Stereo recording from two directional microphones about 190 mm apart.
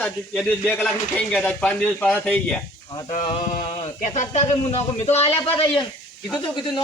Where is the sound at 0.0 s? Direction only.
10° left (ahead or behind).